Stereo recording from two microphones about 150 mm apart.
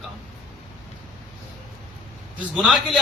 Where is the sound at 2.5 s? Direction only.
Centre (ahead or behind).